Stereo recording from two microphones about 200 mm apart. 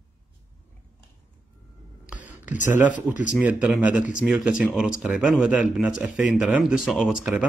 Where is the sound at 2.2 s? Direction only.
40° left (ahead or behind).